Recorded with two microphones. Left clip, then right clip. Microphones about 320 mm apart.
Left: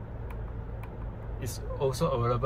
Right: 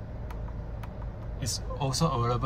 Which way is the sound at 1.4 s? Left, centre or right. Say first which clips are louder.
Left 2 dB; centre.